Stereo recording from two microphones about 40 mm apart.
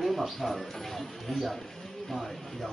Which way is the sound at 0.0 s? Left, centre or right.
Centre.